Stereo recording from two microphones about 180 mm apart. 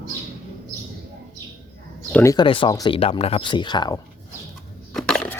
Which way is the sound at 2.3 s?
30° left (ahead or behind).